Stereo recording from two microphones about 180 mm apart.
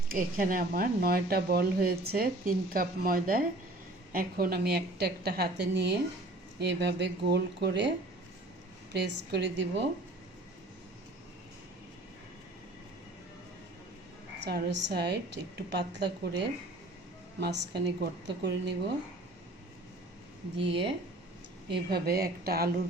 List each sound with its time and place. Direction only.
0.1 s a woman's voice: 50° right (ahead or behind); by 9.8 s 75° right (ahead or behind)
14.4 s speech: 75° right (ahead or behind)
20.6 s speech: 30° right (ahead or behind)
21.7 s a woman's voice: 60° right (ahead or behind)